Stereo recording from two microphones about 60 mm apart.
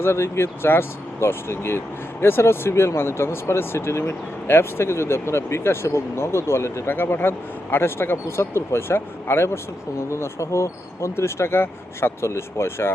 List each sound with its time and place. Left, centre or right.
0.0 s speech: left